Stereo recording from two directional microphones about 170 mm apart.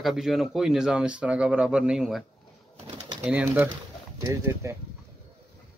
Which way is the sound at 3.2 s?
10° right (ahead or behind).